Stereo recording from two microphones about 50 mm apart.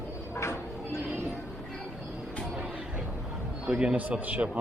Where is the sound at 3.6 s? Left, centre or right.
Centre.